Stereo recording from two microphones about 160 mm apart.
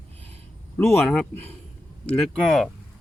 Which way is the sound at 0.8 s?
5° left (ahead or behind).